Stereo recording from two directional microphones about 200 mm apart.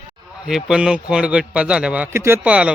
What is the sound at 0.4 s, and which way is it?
A man's voice, 5° right (ahead or behind).